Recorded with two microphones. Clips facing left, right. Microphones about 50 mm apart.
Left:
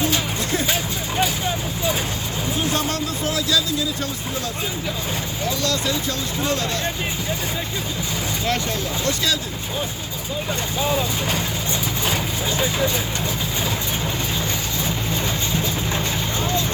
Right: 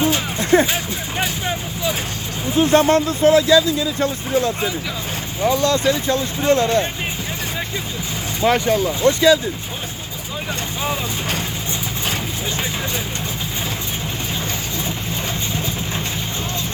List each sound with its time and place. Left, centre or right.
0.0 s music: right
2.6 s speech: right
8.4 s speech: centre